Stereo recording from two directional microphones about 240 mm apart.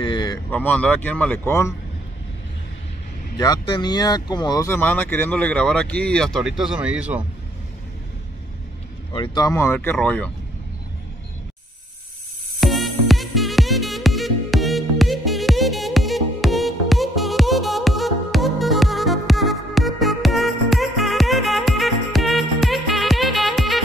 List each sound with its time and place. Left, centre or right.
0.0 s a sound: centre
0.5 s speech: centre
3.3 s speech: centre
9.1 s speech: centre
12.5 s music: centre